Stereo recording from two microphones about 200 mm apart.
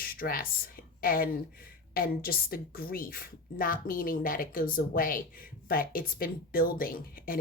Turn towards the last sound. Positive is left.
turn(degrees=45)  # may be behind; listen again after turning